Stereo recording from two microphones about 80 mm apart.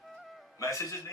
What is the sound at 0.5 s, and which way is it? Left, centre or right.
Speech, left.